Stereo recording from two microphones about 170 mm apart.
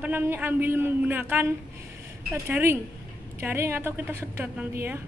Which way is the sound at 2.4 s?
15° right (ahead or behind).